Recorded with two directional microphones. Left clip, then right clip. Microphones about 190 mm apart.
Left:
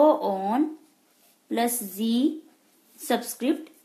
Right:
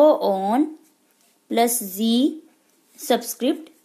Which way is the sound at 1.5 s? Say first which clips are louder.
Right 6 dB; 35° right (ahead or behind).